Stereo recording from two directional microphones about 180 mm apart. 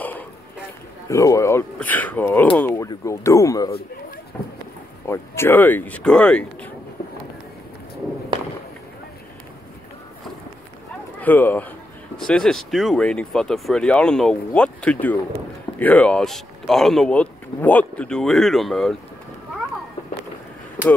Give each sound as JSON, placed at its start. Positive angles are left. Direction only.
{"t": 1.0, "sound": "speech", "side_deg": 15}
{"t": 5.0, "sound": "speech", "side_deg": 15}
{"t": 11.1, "sound": "a man's voice", "side_deg": 10}
{"t": 20.8, "sound": "speech", "side_deg": -10}